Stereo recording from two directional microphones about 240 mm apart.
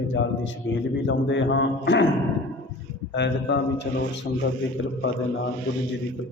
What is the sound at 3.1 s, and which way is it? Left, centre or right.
A man's voice, left.